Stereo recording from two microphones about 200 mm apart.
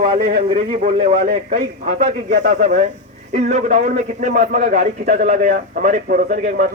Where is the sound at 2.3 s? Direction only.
55° right (ahead or behind).